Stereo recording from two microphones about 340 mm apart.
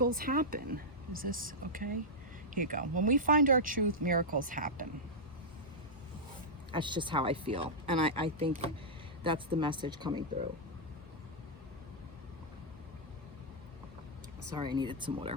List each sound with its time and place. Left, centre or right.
0.0 s speech: right
6.7 s speech: centre
14.5 s speech: centre